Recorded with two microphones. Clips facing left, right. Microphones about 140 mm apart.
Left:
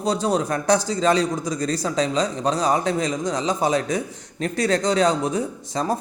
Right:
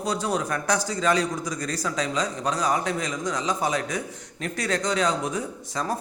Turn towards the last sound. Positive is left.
turn(degrees=30)  # may be behind; listen again after turning